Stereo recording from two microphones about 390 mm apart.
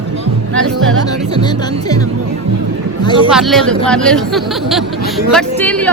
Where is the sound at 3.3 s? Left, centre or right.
Centre.